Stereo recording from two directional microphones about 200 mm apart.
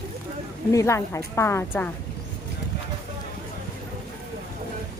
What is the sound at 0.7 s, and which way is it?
Speech, 15° left (ahead or behind).